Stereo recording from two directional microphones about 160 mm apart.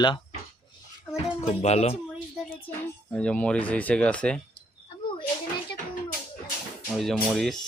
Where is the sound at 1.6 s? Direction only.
40° left (ahead or behind).